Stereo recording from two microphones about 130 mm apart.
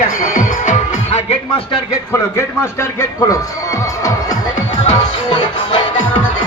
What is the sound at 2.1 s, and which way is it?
Speech, 20° left (ahead or behind).